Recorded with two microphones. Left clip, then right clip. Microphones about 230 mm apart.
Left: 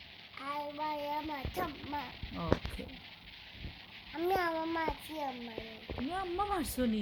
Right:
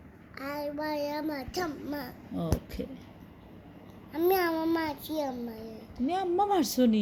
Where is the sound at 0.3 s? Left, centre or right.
Centre.